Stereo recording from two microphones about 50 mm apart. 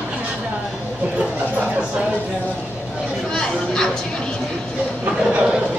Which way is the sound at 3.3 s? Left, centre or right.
Centre.